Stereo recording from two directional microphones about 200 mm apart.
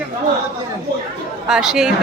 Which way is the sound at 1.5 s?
5° right (ahead or behind).